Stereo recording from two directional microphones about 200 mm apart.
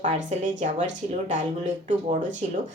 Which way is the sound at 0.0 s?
40° right (ahead or behind).